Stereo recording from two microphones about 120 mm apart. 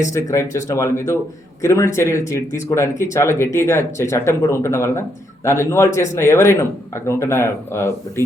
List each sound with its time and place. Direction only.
0.1 s speech: 25° left (ahead or behind)